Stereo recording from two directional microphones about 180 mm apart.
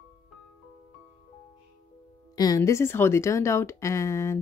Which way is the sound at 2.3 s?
20° left (ahead or behind).